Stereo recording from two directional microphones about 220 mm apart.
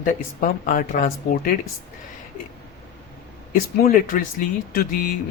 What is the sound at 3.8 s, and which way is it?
Speech, 40° left (ahead or behind).